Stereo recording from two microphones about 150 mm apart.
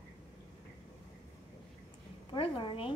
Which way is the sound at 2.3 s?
35° left (ahead or behind).